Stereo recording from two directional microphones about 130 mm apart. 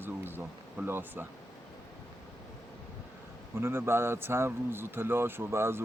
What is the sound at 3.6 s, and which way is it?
A man's voice, 20° right (ahead or behind).